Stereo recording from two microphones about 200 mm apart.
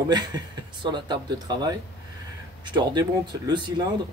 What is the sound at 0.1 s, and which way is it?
Speech, 20° right (ahead or behind).